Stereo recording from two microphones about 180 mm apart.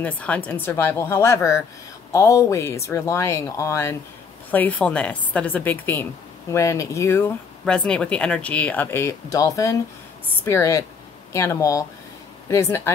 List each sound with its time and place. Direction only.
0.0 s speech: 5° left (ahead or behind)